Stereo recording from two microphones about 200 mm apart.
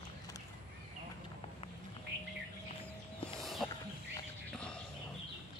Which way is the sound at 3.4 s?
Centre (ahead or behind).